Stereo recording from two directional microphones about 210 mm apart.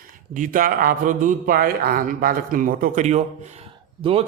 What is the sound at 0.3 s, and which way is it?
A man's voice, 40° right (ahead or behind).